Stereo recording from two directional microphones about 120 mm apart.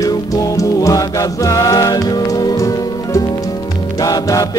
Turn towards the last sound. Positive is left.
turn(degrees=30)  # may be behind; listen again after turning